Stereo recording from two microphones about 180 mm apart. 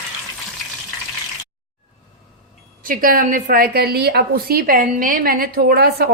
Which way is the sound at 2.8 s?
50° right (ahead or behind).